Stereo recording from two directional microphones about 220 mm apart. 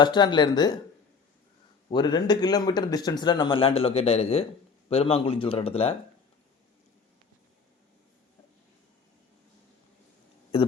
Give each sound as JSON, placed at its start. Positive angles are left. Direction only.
{"t": 0.0, "sound": "speech", "side_deg": 20}
{"t": 1.9, "sound": "speech", "side_deg": 20}